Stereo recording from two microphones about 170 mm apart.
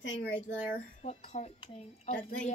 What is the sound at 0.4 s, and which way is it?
Speech, 40° left (ahead or behind).